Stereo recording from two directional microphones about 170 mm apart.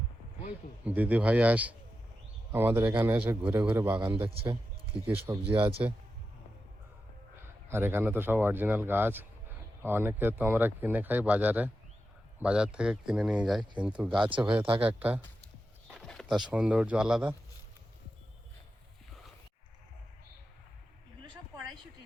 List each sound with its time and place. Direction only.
0.9 s speech: 10° right (ahead or behind)
4.1 s a man's voice: 35° right (ahead or behind)
7.7 s speech: 15° right (ahead or behind)
14.1 s a man's voice: 30° right (ahead or behind)
14.8 s speech: 10° right (ahead or behind)
15.9 s a sound: centre (ahead or behind)
16.5 s speech: 5° right (ahead or behind)